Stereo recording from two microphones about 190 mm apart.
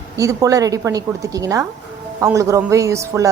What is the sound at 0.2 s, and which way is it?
A woman's voice, 15° right (ahead or behind).